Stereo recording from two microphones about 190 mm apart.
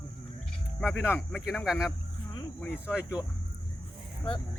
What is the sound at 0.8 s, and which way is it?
Speech, 5° right (ahead or behind).